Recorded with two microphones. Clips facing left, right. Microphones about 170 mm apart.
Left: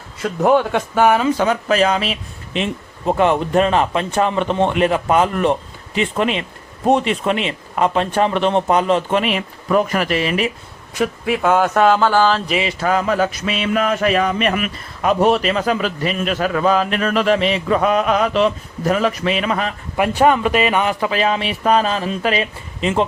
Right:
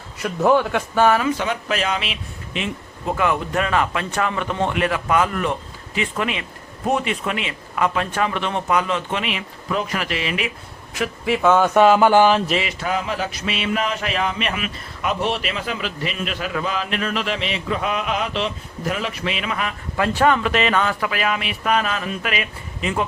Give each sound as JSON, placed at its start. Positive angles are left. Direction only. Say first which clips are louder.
{"t": 0.2, "sound": "a man's voice", "louder": "left 2 dB", "side_deg": 20}
{"t": 1.4, "sound": "a man's voice", "louder": "left 7 dB", "side_deg": 40}
{"t": 11.3, "sound": "speech", "louder": "even", "side_deg": 10}
{"t": 11.7, "sound": "music", "louder": "right 1 dB", "side_deg": -5}
{"t": 12.8, "sound": "a sound", "louder": "left 7 dB", "side_deg": 45}
{"t": 20.0, "sound": "a man's voice", "louder": "left 3 dB", "side_deg": 15}